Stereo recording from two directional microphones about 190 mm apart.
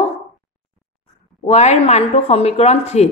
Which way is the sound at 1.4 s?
35° left (ahead or behind).